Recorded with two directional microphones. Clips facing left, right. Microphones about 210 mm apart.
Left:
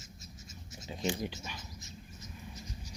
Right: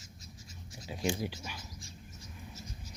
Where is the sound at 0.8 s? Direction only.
10° right (ahead or behind).